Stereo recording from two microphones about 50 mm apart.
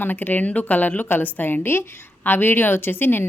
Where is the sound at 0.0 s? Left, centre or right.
Left.